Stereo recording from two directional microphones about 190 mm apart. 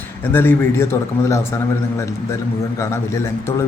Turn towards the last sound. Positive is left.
turn(degrees=15)  # may be behind; listen again after turning